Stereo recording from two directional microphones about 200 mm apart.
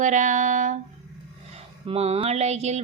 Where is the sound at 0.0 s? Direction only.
40° right (ahead or behind).